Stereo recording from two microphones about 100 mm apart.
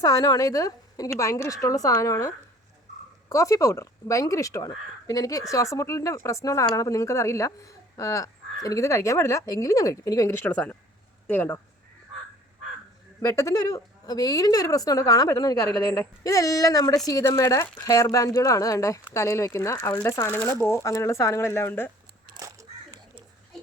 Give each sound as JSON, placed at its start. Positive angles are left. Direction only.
{"t": 0.0, "sound": "a woman's voice", "side_deg": 40}
{"t": 10.3, "sound": "speech", "side_deg": 15}
{"t": 13.2, "sound": "a woman's voice", "side_deg": 30}
{"t": 22.4, "sound": "a sound", "side_deg": -35}